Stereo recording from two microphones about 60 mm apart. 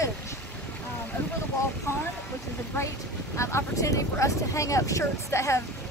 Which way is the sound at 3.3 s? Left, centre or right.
Left.